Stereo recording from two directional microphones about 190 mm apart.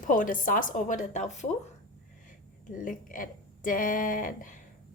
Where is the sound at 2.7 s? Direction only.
45° left (ahead or behind).